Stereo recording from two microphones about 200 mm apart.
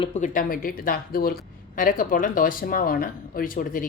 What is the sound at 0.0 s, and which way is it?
Speech, 35° left (ahead or behind).